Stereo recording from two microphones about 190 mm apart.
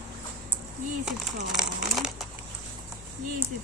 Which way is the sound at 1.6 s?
Centre (ahead or behind).